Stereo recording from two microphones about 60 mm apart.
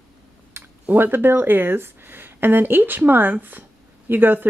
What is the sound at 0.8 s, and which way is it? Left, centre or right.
Speech, right.